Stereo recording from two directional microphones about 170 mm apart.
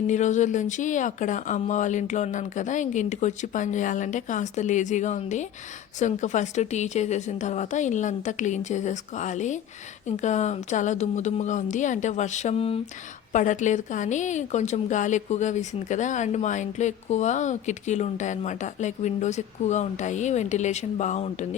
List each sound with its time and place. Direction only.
0.1 s a woman's voice: 45° left (ahead or behind)
13.3 s a woman's voice: 45° left (ahead or behind)